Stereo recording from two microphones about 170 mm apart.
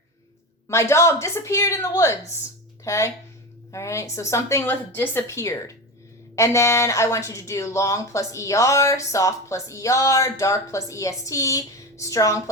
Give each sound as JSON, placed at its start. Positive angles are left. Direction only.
{"t": 0.7, "sound": "speech", "side_deg": 15}